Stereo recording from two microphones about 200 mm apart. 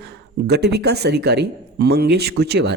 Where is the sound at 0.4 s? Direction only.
55° right (ahead or behind).